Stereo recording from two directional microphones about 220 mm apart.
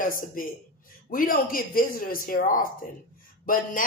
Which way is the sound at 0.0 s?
40° left (ahead or behind).